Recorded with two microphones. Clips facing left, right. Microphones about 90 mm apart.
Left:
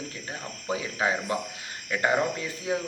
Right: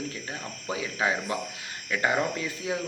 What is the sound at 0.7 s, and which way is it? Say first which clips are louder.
Speech: left 1 dB; 30° left (ahead or behind).